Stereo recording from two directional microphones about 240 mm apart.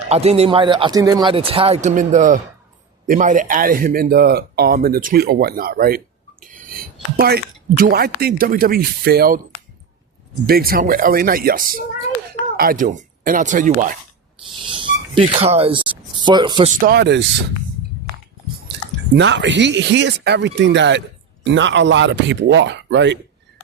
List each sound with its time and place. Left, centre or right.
0.1 s a man's voice: right
10.4 s speech: right
14.6 s a sound: right
16.6 s speech: right
19.1 s speech: right